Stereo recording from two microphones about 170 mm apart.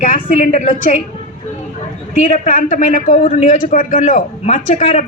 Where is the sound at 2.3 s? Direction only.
45° left (ahead or behind).